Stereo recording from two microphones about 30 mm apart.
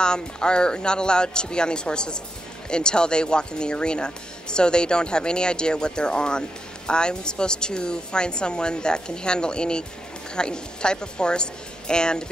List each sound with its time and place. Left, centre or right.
0.0 s speech: left